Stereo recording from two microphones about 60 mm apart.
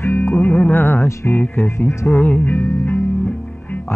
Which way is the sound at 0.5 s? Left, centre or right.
Left.